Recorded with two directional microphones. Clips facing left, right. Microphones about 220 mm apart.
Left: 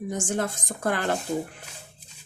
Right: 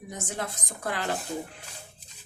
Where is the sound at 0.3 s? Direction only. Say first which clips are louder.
Left 7 dB; 50° left (ahead or behind).